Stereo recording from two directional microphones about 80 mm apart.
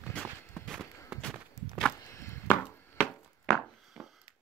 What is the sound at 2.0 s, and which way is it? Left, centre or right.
Chopping, left.